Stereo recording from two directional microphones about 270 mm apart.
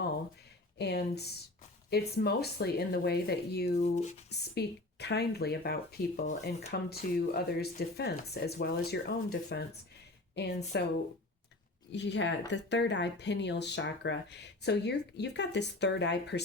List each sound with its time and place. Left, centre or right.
0.8 s speech: left
4.3 s a woman's voice: left
11.9 s speech: left